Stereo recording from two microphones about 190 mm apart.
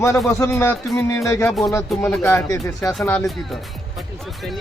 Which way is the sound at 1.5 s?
Centre (ahead or behind).